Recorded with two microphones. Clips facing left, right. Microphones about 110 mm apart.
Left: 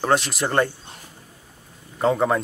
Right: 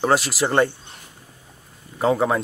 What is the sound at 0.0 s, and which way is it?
Speech, 5° right (ahead or behind).